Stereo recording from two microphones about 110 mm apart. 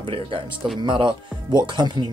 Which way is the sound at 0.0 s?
55° right (ahead or behind).